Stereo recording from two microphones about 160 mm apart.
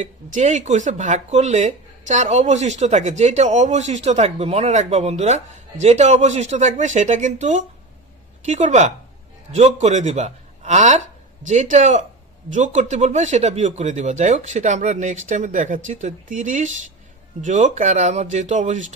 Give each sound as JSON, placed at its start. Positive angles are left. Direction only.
{"t": 0.0, "sound": "speech", "side_deg": -50}